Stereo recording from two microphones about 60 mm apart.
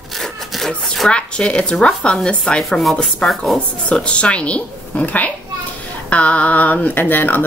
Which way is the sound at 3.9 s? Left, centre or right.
Centre.